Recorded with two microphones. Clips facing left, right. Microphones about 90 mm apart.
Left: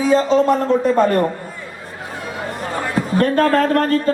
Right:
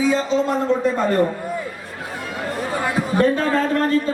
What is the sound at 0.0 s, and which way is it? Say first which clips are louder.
Speech: left 4 dB; 50° left (ahead or behind).